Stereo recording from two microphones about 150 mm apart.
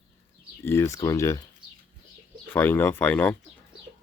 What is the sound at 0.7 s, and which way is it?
Speech, 20° left (ahead or behind).